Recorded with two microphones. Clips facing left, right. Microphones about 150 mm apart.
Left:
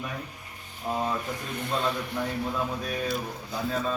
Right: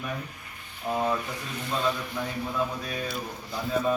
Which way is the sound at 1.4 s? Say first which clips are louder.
Left 2 dB; 55° left (ahead or behind).